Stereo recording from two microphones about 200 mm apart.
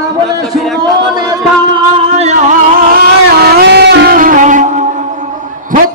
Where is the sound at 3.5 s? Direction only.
60° right (ahead or behind); by 4.8 s 40° right (ahead or behind).